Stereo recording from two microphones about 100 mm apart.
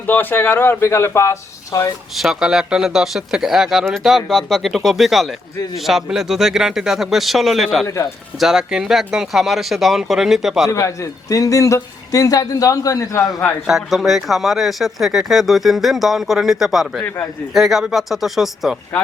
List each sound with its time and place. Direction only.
0.1 s speech: 20° left (ahead or behind)
2.1 s speech: 5° right (ahead or behind)
7.9 s a man's voice: 30° left (ahead or behind)
8.4 s speech: 5° right (ahead or behind)
10.7 s a man's voice: 30° left (ahead or behind)
13.7 s speech: centre (ahead or behind)